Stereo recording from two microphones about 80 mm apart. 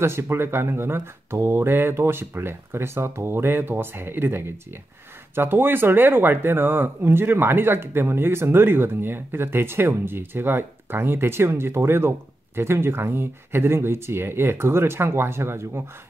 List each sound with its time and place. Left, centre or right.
0.0 s speech: right